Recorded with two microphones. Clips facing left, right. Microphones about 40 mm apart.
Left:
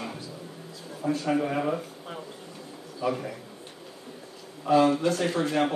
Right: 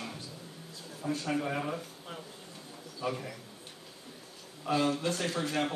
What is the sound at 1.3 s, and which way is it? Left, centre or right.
Speech, left.